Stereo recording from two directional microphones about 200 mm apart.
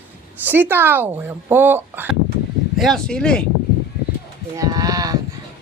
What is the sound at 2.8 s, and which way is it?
Speech, centre (ahead or behind).